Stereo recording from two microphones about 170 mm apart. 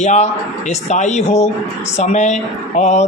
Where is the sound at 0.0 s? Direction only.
45° left (ahead or behind).